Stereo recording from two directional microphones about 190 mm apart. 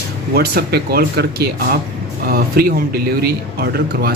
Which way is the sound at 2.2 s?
55° right (ahead or behind).